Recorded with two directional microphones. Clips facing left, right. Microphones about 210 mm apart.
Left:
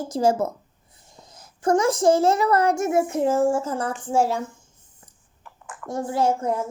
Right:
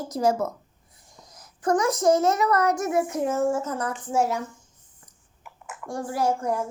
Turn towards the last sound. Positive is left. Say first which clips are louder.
# left 2 dB
turn(degrees=25)  # may be behind; listen again after turning